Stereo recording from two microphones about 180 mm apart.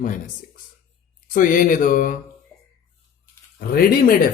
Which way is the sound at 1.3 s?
50° left (ahead or behind).